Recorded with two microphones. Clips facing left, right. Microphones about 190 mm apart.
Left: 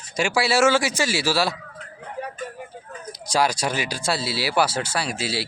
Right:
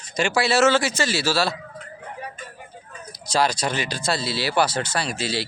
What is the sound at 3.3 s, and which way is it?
Speech, 10° left (ahead or behind).